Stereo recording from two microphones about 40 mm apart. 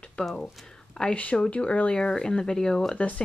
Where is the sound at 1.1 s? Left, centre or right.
Left; by 2.8 s centre.